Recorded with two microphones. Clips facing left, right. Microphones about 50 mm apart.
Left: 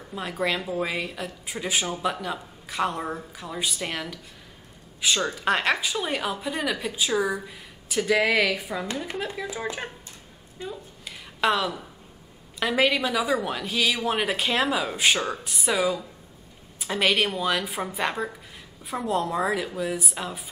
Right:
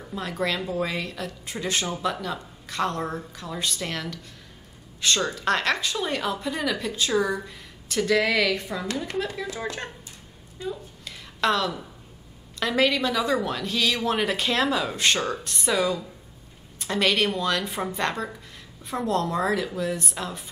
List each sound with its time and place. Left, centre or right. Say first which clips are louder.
0.1 s a woman's voice: even; centre
10.6 s speech: right 3 dB; left
11.1 s a sound: even; centre
12.5 s a woman's voice: even; centre